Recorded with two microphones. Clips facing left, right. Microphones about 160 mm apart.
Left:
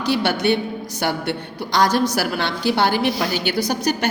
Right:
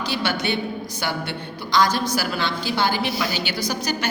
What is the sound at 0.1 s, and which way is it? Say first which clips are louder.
A woman's voice: left 7 dB; 60° left (ahead or behind).